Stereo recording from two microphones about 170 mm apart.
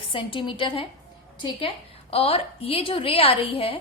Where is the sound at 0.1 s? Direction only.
30° left (ahead or behind).